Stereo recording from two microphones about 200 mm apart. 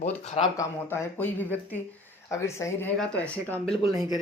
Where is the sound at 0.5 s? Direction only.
15° left (ahead or behind).